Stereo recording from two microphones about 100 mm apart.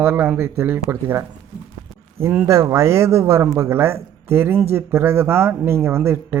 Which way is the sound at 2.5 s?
30° right (ahead or behind).